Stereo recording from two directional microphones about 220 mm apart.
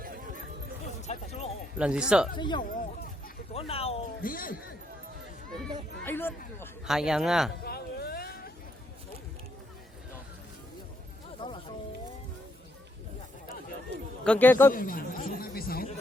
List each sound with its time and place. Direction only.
0.0 s music: 40° right (ahead or behind)
1.0 s music: 30° left (ahead or behind)
1.8 s a man's voice: 5° right (ahead or behind)
2.3 s speech: 20° left (ahead or behind)
4.2 s speech: 40° left (ahead or behind)
5.6 s a sound: 10° left (ahead or behind)
6.8 s a man's voice: centre (ahead or behind)
7.6 s vehicle: 45° left (ahead or behind)
11.3 s music: 25° left (ahead or behind)
14.3 s a man's voice: 10° left (ahead or behind)
14.7 s speech: 40° left (ahead or behind)